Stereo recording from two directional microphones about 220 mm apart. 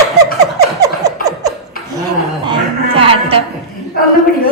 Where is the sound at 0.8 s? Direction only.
15° right (ahead or behind).